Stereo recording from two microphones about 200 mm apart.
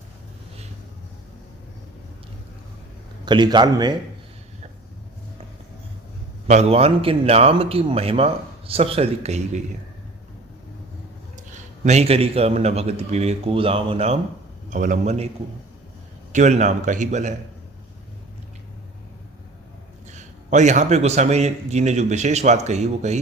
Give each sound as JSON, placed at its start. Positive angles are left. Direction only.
{"t": 3.2, "sound": "speech", "side_deg": -20}
{"t": 6.5, "sound": "speech", "side_deg": -30}
{"t": 11.5, "sound": "a man's voice", "side_deg": -35}
{"t": 16.3, "sound": "a man's voice", "side_deg": -35}
{"t": 20.1, "sound": "a man's voice", "side_deg": -35}